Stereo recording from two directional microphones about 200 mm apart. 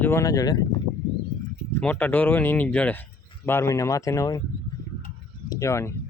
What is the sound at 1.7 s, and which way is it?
Speech, 10° left (ahead or behind).